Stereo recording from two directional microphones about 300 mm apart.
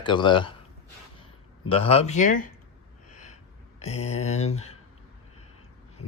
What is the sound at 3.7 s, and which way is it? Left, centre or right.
Speech, left.